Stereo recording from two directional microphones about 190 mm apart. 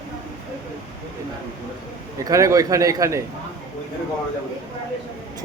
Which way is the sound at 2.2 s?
15° right (ahead or behind).